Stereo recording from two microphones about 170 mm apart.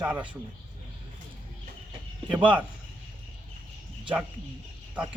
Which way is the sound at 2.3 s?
10° right (ahead or behind).